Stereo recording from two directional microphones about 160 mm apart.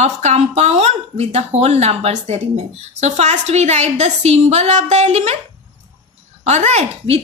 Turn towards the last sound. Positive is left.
turn(degrees=-40)  # may be behind; listen again after turning